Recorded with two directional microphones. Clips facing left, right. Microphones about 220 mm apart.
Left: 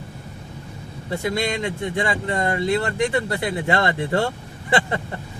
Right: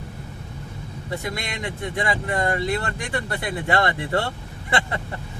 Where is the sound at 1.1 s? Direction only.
25° left (ahead or behind).